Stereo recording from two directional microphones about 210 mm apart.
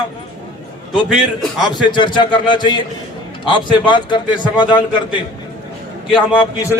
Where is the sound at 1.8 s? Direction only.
20° left (ahead or behind).